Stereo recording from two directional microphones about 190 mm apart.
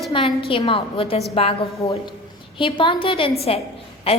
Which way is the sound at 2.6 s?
25° left (ahead or behind).